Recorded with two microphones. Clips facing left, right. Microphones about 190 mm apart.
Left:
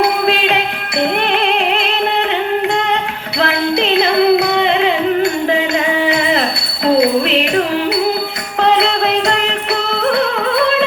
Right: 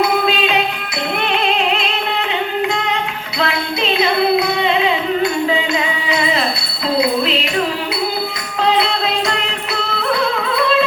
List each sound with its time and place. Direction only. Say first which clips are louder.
0.0 s music: left 2 dB; 65° left (ahead or behind)
3.4 s music: left 4 dB; 65° left (ahead or behind)
6.8 s a sound: left 4 dB; 60° left (ahead or behind)
8.6 s music: left 3 dB; 70° left (ahead or behind)